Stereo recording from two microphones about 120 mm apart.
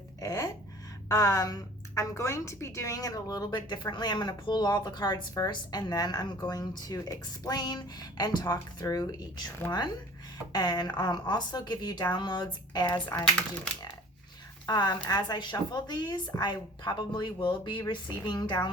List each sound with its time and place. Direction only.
0.2 s a sound: 30° left (ahead or behind)
1.0 s a woman's voice: 25° left (ahead or behind)
10.5 s a woman's voice: 35° left (ahead or behind)
14.7 s a woman's voice: 35° left (ahead or behind)